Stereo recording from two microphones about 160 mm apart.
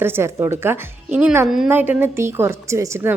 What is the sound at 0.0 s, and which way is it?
Speech, 15° right (ahead or behind).